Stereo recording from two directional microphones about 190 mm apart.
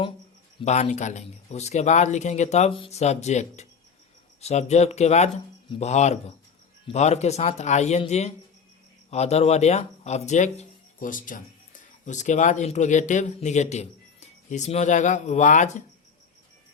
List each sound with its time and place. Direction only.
0.6 s speech: 35° left (ahead or behind)